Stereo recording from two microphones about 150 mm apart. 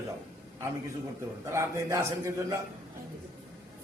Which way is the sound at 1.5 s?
20° right (ahead or behind).